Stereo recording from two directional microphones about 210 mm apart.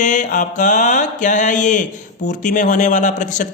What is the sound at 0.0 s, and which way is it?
Speech, 35° left (ahead or behind).